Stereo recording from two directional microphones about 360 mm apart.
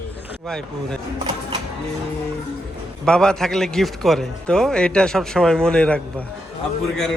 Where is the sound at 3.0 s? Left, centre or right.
Centre.